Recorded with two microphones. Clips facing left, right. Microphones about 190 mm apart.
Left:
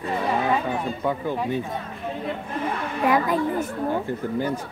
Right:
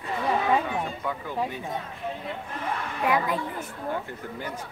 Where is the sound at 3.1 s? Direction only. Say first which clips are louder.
Left 5 dB; 40° left (ahead or behind).